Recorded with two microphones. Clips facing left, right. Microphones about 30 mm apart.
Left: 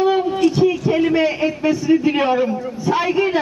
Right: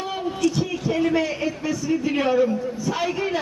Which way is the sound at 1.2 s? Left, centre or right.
Left.